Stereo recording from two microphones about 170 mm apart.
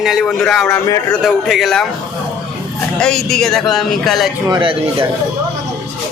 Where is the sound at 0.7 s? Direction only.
15° left (ahead or behind).